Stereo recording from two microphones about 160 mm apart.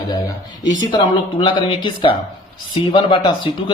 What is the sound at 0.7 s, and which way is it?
A man's voice, 30° left (ahead or behind).